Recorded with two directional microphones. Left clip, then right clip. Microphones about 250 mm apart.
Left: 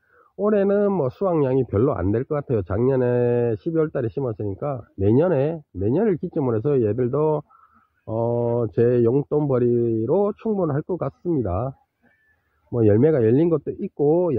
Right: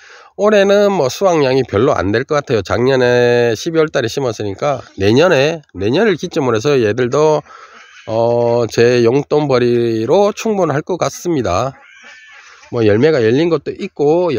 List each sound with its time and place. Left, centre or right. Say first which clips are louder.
0.4 s speech: right 10 dB; centre
12.7 s speech: right 6 dB; centre